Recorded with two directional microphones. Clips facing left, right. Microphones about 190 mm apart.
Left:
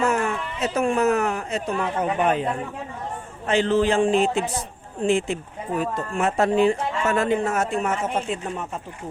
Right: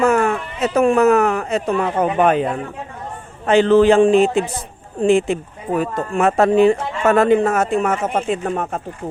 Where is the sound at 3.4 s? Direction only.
60° right (ahead or behind).